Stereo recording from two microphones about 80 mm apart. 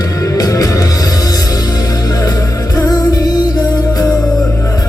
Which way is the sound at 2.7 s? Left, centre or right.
Left.